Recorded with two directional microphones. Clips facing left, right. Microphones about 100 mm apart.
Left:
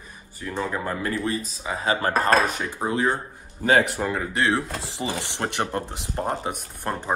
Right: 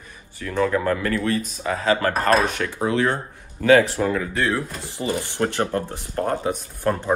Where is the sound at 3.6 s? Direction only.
65° right (ahead or behind).